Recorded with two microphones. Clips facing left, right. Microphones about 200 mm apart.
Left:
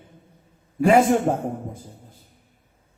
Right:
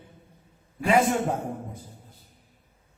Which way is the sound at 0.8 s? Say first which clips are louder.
Left 6 dB; 45° left (ahead or behind).